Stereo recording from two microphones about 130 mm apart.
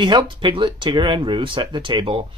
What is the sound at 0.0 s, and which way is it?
Speech, 35° right (ahead or behind).